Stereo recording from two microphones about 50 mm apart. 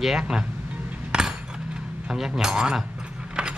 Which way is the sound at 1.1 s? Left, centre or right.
Centre.